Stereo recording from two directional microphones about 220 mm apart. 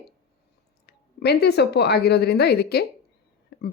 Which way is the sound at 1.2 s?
45° left (ahead or behind).